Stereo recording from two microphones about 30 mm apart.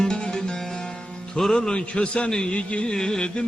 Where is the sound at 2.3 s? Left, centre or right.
Left.